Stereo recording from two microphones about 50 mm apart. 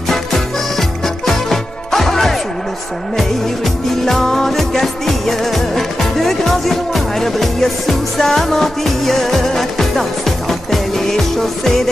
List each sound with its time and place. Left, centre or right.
0.1 s music: centre
4.0 s music: centre